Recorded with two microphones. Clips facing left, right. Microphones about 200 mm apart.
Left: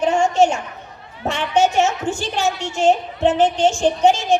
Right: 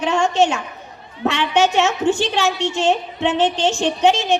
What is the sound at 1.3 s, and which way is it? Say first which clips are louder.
A woman's voice: even; 70° right (ahead or behind).